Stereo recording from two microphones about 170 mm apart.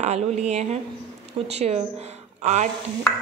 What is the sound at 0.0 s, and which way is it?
A woman's voice, 40° right (ahead or behind).